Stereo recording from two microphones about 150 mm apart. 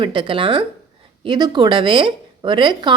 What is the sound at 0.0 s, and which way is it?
Speech, 35° right (ahead or behind).